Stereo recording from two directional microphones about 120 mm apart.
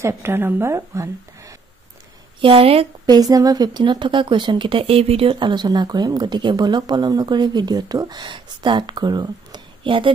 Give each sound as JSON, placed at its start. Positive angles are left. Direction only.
{"t": 0.0, "sound": "a woman's voice", "side_deg": -20}
{"t": 2.4, "sound": "a woman's voice", "side_deg": -50}
{"t": 3.1, "sound": "speech", "side_deg": -30}